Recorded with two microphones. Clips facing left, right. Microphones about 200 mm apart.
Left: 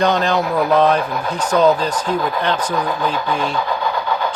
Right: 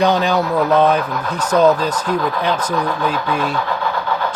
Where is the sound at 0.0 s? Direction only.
Centre (ahead or behind).